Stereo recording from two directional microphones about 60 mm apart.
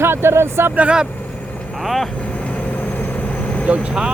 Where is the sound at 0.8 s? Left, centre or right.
Centre.